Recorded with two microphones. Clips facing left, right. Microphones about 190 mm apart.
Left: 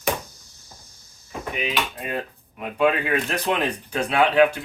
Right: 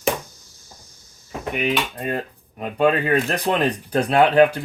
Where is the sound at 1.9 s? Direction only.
40° right (ahead or behind).